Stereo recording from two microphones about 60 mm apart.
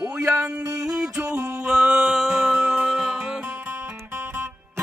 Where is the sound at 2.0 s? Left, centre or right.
Centre.